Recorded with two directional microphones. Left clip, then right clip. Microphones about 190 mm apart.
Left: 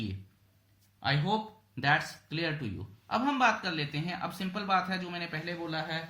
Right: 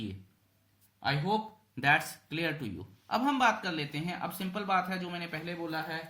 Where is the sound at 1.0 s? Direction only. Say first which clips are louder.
Even; 15° right (ahead or behind).